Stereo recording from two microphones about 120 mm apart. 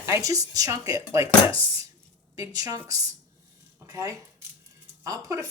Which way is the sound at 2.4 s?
30° right (ahead or behind).